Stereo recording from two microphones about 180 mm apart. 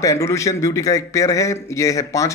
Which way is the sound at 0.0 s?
15° left (ahead or behind).